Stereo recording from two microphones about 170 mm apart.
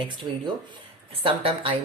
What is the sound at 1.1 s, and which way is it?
Speech, 30° right (ahead or behind).